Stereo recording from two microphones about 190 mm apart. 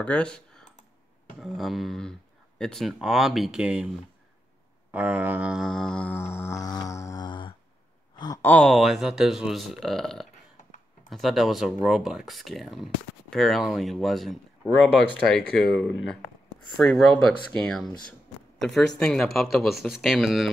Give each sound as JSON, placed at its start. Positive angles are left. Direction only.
{"t": 0.0, "sound": "speech", "side_deg": 5}
{"t": 4.9, "sound": "a sound", "side_deg": -5}
{"t": 8.2, "sound": "speech", "side_deg": 20}
{"t": 8.5, "sound": "speech", "side_deg": 5}